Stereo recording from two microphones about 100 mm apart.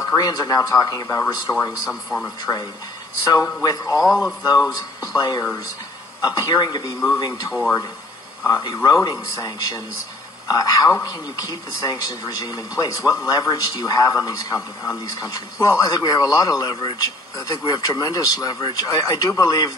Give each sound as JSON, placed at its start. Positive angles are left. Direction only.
{"t": 0.0, "sound": "speech", "side_deg": 40}
{"t": 1.9, "sound": "speech", "side_deg": 0}
{"t": 2.2, "sound": "speech", "side_deg": 40}
{"t": 3.6, "sound": "speech", "side_deg": 40}
{"t": 4.0, "sound": "speech", "side_deg": 0}
{"t": 4.4, "sound": "speech", "side_deg": 40}